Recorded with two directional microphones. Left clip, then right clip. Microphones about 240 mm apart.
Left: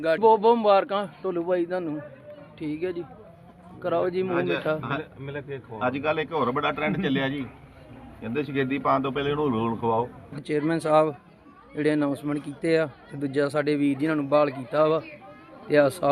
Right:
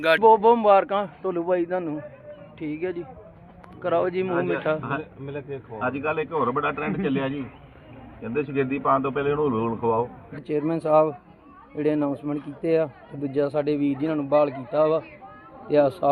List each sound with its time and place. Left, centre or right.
0.0 s a man's voice: centre
5.2 s speech: centre
5.8 s a man's voice: centre
13.7 s a man's voice: left
14.1 s a man's voice: centre